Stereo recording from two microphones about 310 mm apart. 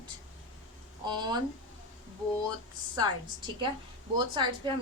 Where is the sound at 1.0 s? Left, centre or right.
Centre.